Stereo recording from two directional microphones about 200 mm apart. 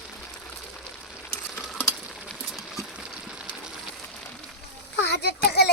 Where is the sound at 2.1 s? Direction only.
Centre (ahead or behind).